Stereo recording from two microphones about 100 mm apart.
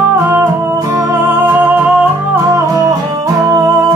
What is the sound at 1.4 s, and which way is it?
Music, 20° right (ahead or behind).